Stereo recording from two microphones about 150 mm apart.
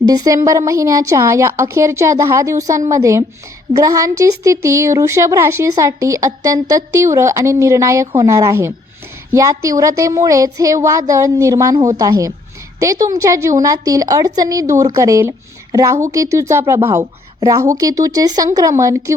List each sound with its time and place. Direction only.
0.1 s speech: 25° right (ahead or behind)